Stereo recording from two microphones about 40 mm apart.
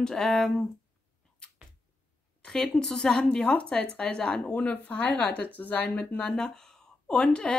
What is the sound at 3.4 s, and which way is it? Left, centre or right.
Speech, left.